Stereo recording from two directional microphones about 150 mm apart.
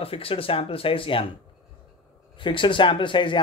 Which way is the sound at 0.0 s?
40° left (ahead or behind).